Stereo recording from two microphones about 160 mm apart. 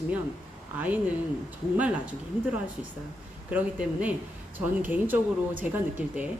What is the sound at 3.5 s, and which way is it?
Speech, 10° right (ahead or behind).